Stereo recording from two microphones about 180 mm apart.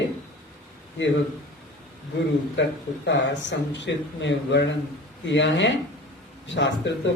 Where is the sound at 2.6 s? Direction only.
85° left.